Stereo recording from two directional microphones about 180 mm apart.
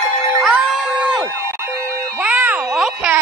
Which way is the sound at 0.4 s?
Centre (ahead or behind).